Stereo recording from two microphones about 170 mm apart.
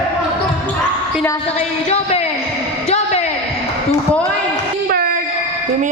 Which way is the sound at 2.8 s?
40° left (ahead or behind).